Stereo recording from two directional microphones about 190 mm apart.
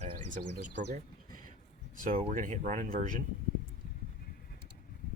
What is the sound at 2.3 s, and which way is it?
Speech, 40° right (ahead or behind).